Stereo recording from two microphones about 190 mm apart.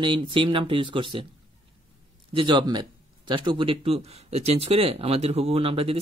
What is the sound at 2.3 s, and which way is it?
Speech, 25° right (ahead or behind).